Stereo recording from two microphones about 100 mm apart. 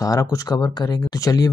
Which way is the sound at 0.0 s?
35° left (ahead or behind).